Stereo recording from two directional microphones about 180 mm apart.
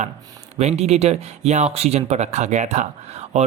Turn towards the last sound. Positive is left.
turn(degrees=-40)  # may be behind; listen again after turning